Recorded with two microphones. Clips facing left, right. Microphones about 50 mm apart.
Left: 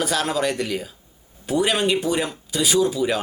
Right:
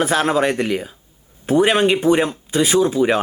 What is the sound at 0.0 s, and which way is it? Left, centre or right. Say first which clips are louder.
Speech: right 5 dB; right.